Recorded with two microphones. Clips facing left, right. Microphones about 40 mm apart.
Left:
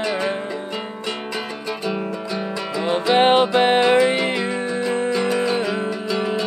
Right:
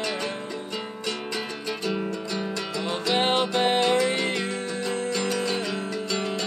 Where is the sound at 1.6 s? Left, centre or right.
Centre.